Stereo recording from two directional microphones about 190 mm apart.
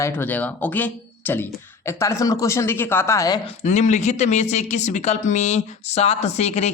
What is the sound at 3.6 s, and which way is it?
Speech, 35° left (ahead or behind).